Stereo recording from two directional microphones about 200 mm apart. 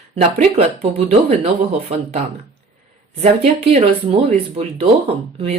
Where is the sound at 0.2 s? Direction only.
35° right (ahead or behind).